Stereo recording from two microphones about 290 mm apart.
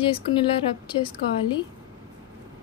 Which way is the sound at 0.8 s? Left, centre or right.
Centre.